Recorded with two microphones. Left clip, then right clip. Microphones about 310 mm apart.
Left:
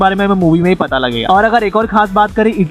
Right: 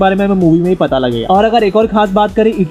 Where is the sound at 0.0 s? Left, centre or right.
Centre.